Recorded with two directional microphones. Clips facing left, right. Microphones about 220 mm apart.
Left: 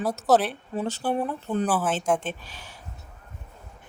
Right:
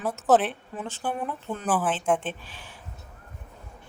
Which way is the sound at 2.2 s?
40° left (ahead or behind).